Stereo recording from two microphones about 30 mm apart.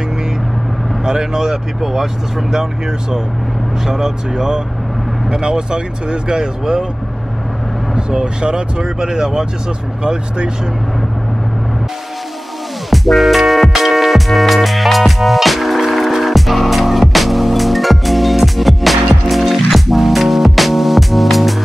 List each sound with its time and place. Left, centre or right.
1.0 s vehicle: right
1.8 s speech: centre
7.9 s speech: centre
8.4 s speech: right
12.9 s music: centre